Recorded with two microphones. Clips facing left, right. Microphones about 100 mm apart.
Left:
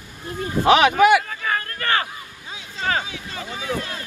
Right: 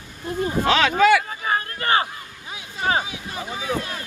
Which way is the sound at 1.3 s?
25° right (ahead or behind).